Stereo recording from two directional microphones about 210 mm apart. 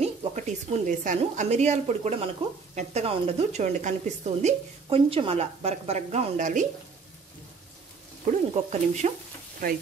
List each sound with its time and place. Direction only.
0.0 s speech: 30° right (ahead or behind)
8.3 s speech: 35° right (ahead or behind)